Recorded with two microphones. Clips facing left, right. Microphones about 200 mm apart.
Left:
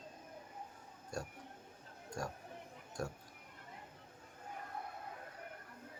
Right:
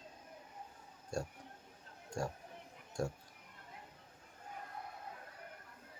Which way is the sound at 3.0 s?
25° right (ahead or behind).